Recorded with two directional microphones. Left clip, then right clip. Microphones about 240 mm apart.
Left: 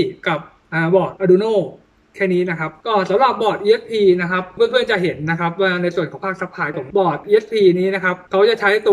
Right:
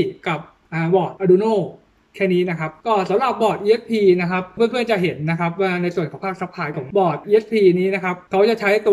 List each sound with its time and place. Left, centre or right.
0.0 s a man's voice: centre